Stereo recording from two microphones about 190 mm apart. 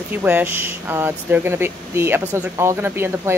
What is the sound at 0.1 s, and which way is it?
Speech, 10° right (ahead or behind).